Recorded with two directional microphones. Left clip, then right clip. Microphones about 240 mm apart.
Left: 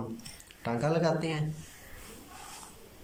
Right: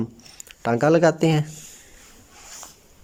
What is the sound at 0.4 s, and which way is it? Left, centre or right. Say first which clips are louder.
Speech: right 12 dB; right.